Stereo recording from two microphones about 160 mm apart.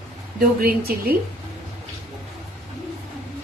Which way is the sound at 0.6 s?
70° right (ahead or behind).